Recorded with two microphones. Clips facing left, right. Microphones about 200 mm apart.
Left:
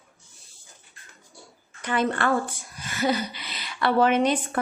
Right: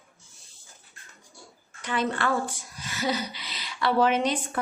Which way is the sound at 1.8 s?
50° left (ahead or behind).